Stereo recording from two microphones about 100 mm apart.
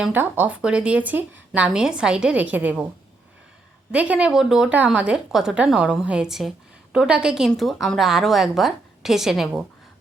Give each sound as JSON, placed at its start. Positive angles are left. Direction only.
{"t": 0.1, "sound": "speech", "side_deg": -15}
{"t": 3.9, "sound": "a woman's voice", "side_deg": -10}